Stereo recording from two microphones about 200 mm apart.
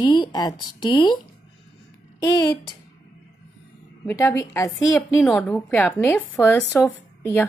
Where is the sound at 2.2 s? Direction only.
20° left (ahead or behind).